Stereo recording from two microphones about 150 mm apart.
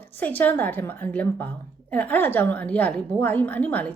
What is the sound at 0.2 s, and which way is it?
Speech, 10° left (ahead or behind).